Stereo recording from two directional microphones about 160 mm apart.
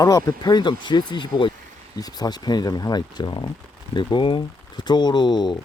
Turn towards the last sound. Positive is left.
turn(degrees=25)  # may be behind; listen again after turning